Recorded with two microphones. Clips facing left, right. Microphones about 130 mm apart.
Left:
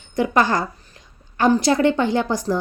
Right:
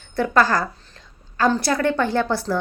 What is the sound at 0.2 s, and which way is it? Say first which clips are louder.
A woman's voice: even; 20° left (ahead or behind).